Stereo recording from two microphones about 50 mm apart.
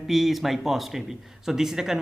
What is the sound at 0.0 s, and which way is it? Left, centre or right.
A man's voice, centre.